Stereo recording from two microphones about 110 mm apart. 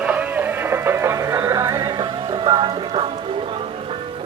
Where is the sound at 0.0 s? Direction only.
15° right (ahead or behind).